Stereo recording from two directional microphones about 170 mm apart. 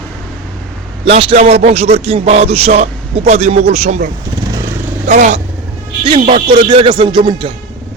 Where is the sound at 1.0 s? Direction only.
35° right (ahead or behind).